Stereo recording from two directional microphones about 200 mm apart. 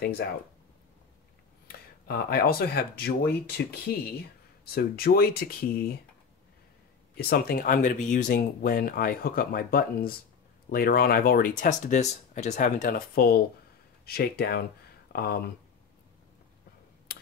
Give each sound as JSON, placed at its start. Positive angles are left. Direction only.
{"t": 1.7, "sound": "speech", "side_deg": 50}
{"t": 7.2, "sound": "speech", "side_deg": 50}